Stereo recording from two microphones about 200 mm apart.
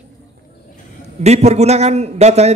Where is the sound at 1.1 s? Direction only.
35° right (ahead or behind).